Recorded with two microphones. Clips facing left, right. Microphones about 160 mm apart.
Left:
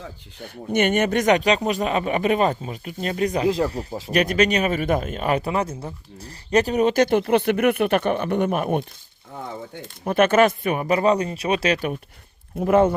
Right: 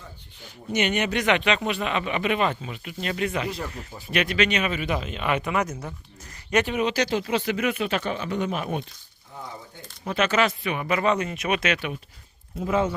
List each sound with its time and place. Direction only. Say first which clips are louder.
0.0 s speech: left 8 dB; 60° left (ahead or behind)
10.0 s speech: left 6 dB; 50° left (ahead or behind)
12.5 s speech: left 7 dB; 55° left (ahead or behind)